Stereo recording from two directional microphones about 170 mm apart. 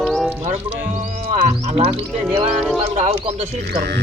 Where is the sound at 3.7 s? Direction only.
70° right (ahead or behind).